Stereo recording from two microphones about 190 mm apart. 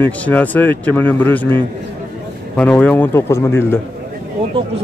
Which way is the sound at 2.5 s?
5° left (ahead or behind).